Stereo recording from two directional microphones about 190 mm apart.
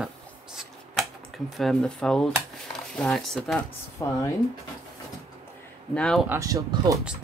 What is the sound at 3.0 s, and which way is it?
Speech, centre (ahead or behind).